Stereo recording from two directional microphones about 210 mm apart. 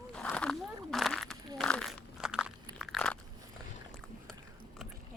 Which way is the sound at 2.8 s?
5° left (ahead or behind).